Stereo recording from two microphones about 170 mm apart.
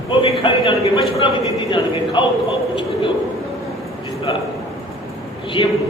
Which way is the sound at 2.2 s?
30° left (ahead or behind).